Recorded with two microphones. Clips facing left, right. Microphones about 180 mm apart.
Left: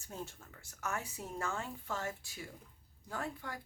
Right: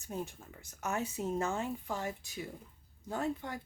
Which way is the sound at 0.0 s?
20° right (ahead or behind).